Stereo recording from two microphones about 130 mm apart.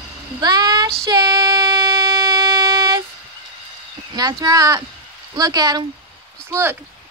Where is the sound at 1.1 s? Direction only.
30° right (ahead or behind).